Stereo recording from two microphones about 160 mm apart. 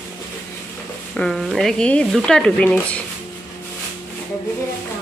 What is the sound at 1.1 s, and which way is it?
Speech, 5° left (ahead or behind).